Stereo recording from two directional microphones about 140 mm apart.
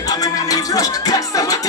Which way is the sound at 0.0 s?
25° left (ahead or behind).